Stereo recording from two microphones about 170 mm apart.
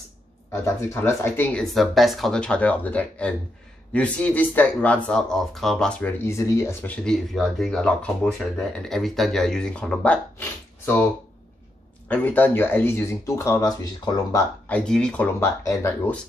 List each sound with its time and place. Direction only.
0.6 s speech: 15° left (ahead or behind)
12.1 s speech: 10° left (ahead or behind)
14.7 s speech: 5° left (ahead or behind)
15.4 s speech: 15° left (ahead or behind)